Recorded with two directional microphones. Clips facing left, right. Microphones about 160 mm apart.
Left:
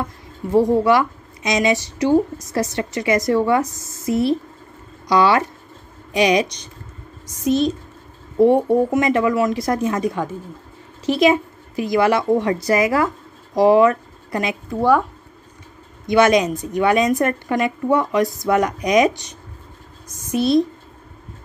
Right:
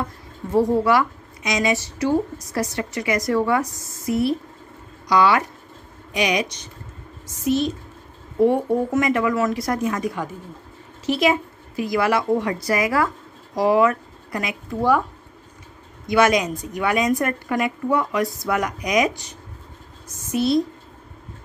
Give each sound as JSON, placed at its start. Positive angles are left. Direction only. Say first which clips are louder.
{"t": 0.5, "sound": "a woman's voice", "louder": "left 3 dB", "side_deg": 20}
{"t": 16.1, "sound": "a woman's voice", "louder": "left 3 dB", "side_deg": 25}